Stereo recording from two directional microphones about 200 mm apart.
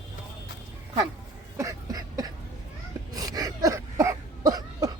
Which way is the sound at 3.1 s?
20° right (ahead or behind).